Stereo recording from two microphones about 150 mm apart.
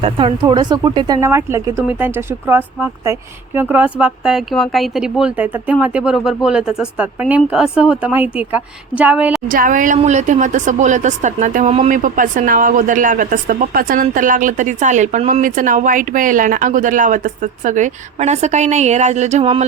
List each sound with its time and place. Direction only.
0.0 s speech: 35° right (ahead or behind); by 9.4 s 10° right (ahead or behind)
9.5 s a woman's voice: 65° right (ahead or behind); by 11.9 s 50° right (ahead or behind)
12.0 s a woman's voice: 60° right (ahead or behind); by 19.6 s 45° right (ahead or behind)